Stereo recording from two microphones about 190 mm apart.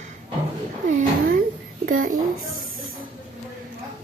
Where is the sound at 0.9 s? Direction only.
45° right (ahead or behind).